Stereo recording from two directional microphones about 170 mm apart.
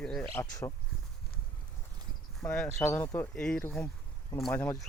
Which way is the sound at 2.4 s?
5° left (ahead or behind).